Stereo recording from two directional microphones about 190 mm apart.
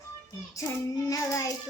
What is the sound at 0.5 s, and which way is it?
Child singing, 15° left (ahead or behind).